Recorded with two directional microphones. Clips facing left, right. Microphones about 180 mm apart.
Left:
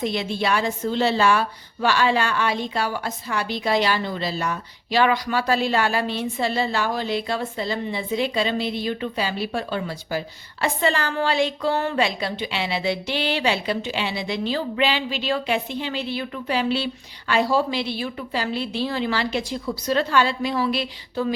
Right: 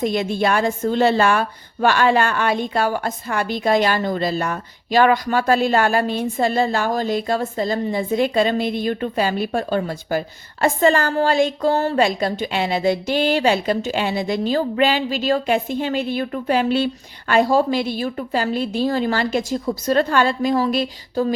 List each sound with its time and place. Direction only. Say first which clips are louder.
0.0 s a woman's voice: right 5 dB; 50° right (ahead or behind)